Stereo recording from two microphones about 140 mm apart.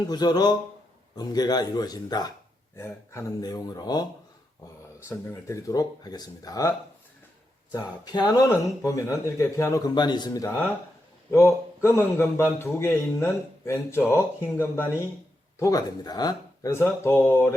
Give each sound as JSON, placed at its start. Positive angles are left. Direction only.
{"t": 0.0, "sound": "speech", "side_deg": 30}
{"t": 2.7, "sound": "speech", "side_deg": 20}
{"t": 5.0, "sound": "a man's voice", "side_deg": 25}
{"t": 16.7, "sound": "speech", "side_deg": 15}